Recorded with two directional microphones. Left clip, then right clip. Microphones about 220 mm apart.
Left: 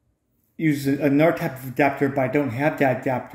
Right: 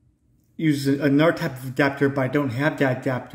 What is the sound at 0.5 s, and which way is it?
A man's voice, 15° right (ahead or behind).